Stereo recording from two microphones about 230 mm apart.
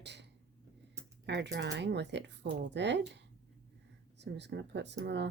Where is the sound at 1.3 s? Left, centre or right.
Right.